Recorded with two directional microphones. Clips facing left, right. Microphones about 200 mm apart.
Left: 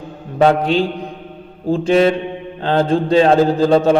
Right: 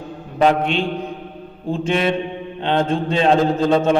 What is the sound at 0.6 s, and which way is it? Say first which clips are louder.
A man's voice: left 4 dB; 35° left (ahead or behind).